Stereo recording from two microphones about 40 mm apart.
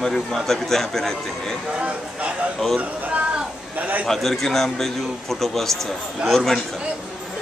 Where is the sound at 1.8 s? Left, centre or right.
Right.